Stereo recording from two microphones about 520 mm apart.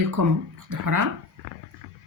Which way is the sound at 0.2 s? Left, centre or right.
Right.